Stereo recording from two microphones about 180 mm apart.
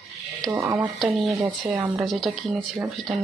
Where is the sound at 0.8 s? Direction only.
Centre (ahead or behind).